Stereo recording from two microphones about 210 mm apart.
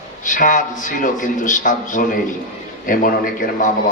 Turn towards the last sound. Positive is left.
turn(degrees=40)  # may be behind; listen again after turning